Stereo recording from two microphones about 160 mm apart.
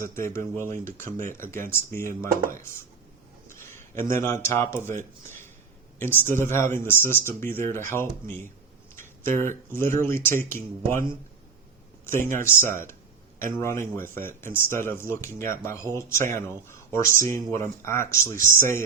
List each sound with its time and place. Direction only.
0.0 s speech: 15° left (ahead or behind)
6.1 s speech: 15° left (ahead or behind)
12.0 s speech: 15° left (ahead or behind)